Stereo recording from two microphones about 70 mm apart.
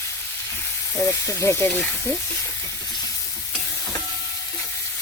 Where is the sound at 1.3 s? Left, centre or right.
Left.